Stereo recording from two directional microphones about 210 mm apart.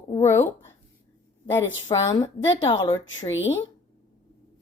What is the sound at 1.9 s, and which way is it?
A woman's voice, 20° left (ahead or behind).